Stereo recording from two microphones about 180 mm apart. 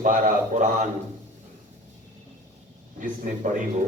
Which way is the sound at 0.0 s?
45° right (ahead or behind).